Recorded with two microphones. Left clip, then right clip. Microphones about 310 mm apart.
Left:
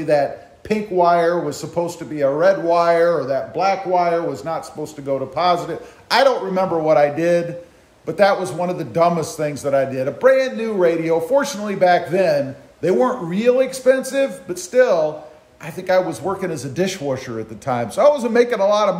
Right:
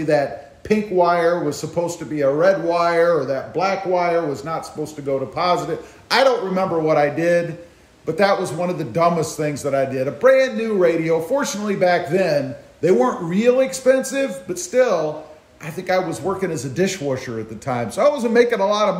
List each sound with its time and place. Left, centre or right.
0.0 s speech: centre